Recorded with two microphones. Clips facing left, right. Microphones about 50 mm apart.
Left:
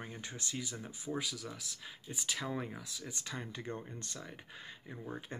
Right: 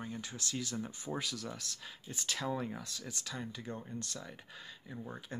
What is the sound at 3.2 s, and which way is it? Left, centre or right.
Speech, left.